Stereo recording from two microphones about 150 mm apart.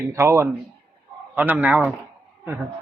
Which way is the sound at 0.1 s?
20° right (ahead or behind).